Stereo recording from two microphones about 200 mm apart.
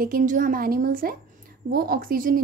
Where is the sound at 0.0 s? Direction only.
45° right (ahead or behind).